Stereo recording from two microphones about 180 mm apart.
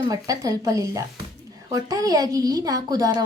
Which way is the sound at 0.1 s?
20° right (ahead or behind).